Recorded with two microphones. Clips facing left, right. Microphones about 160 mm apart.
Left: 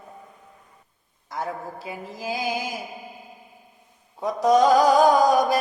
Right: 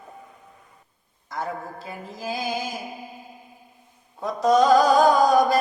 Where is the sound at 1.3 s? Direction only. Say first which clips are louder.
Even; 15° left (ahead or behind).